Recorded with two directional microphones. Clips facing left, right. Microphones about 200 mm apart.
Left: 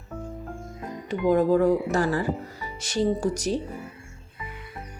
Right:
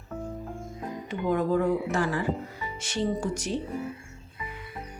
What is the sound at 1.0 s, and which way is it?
Speech, 35° left (ahead or behind).